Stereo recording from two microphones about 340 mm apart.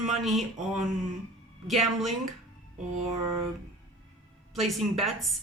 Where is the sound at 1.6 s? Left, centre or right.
Centre.